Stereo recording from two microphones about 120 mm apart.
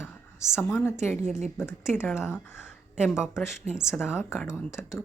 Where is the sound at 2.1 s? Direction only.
5° right (ahead or behind).